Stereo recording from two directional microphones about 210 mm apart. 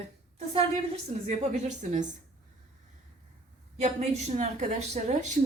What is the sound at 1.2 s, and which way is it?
Speech, 35° right (ahead or behind).